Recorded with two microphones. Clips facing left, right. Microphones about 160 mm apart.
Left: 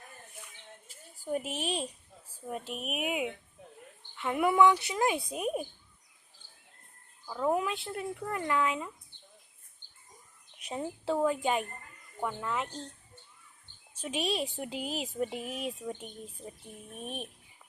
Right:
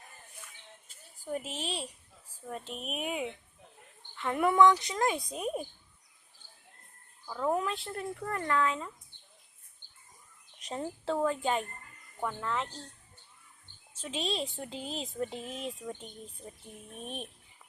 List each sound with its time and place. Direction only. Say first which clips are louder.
1.2 s speech: left 3 dB; 15° left (ahead or behind)
7.3 s speech: left 1 dB; 10° left (ahead or behind)
10.6 s speech: left 1 dB; 10° left (ahead or behind)
13.9 s speech: left 2 dB; 15° left (ahead or behind)